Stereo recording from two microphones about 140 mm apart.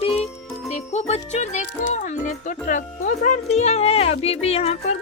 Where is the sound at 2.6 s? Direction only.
70° left (ahead or behind).